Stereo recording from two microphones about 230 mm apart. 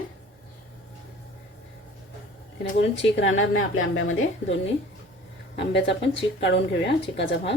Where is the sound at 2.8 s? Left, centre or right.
Left.